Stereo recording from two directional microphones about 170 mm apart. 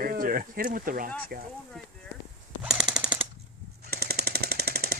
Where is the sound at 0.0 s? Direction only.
60° right (ahead or behind).